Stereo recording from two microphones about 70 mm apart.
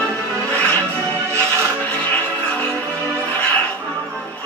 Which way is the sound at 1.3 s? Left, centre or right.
Right.